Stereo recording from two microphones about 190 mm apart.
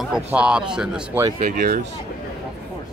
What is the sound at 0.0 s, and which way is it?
Speech, 5° right (ahead or behind).